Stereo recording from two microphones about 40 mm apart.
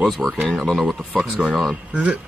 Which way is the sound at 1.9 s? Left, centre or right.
Right.